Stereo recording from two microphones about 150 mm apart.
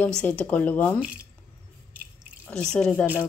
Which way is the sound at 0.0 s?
10° left (ahead or behind).